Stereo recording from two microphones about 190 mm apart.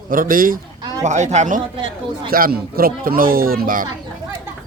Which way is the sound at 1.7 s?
30° right (ahead or behind).